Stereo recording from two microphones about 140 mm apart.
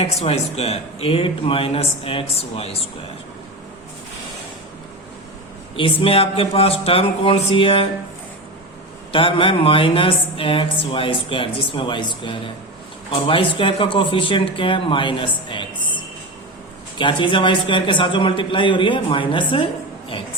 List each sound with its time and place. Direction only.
0.0 s speech: 45° left (ahead or behind)
5.7 s speech: 40° left (ahead or behind)
9.1 s speech: 40° left (ahead or behind)
17.0 s speech: 35° left (ahead or behind)